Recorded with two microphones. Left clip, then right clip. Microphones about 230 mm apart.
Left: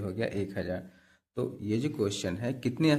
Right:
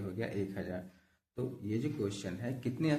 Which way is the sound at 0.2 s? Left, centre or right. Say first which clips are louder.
Left 5 dB; left.